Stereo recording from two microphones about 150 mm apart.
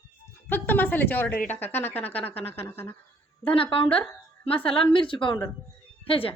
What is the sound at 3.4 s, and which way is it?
A woman's voice, 35° left (ahead or behind).